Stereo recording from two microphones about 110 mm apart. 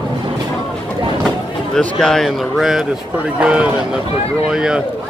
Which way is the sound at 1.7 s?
5° left (ahead or behind).